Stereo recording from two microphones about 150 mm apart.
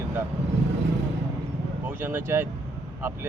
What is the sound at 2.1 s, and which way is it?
Speech, 15° right (ahead or behind).